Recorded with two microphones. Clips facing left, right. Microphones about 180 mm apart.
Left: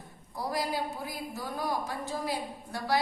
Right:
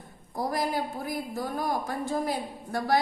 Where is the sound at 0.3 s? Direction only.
50° right (ahead or behind).